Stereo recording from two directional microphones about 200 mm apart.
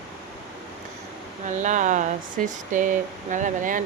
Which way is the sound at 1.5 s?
40° right (ahead or behind).